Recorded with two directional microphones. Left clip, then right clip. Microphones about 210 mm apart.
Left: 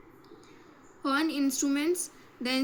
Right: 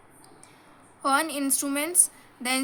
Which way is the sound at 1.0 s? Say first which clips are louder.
Right 4 dB; 60° right (ahead or behind).